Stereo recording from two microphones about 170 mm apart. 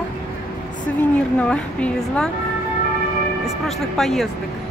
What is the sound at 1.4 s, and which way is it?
Speech, 5° left (ahead or behind).